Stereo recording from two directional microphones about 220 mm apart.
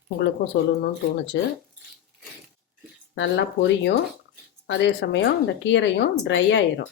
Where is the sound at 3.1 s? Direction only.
50° left (ahead or behind).